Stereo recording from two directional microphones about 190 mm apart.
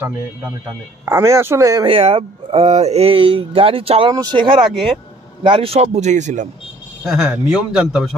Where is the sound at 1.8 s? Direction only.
30° right (ahead or behind).